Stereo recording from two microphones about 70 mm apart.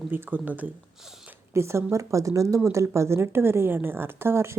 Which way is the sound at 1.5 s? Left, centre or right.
Right.